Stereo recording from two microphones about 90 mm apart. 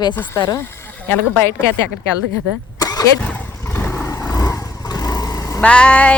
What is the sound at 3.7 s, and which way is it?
Vehicle, 25° left (ahead or behind).